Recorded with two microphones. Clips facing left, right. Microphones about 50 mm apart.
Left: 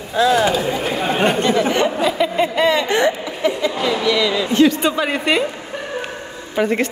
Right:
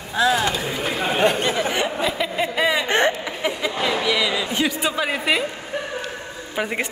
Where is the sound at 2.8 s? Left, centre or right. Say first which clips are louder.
Left 2 dB; right.